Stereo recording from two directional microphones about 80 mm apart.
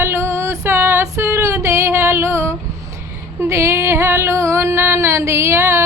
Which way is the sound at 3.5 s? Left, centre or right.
Right.